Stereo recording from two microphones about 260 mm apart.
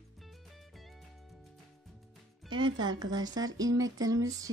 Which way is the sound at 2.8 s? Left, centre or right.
Centre.